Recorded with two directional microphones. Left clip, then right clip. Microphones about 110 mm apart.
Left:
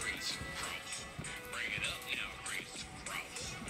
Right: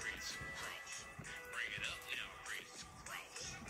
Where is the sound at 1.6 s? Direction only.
40° left (ahead or behind).